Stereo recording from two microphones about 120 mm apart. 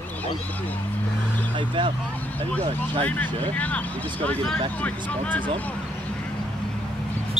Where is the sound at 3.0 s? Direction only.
15° left (ahead or behind).